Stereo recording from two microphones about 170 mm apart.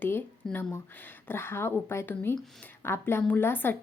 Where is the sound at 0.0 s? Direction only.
10° left (ahead or behind).